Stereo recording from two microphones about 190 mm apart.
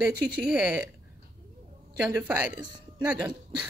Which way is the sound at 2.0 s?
5° right (ahead or behind).